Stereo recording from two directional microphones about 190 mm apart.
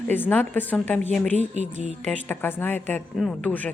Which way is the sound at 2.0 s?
10° left (ahead or behind).